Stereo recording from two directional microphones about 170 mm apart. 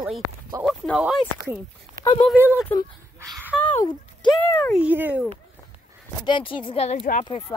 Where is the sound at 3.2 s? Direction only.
15° right (ahead or behind).